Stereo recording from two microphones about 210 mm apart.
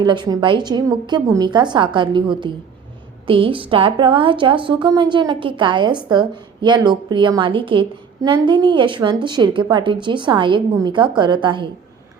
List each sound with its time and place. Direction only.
0.0 s a woman's voice: 20° right (ahead or behind)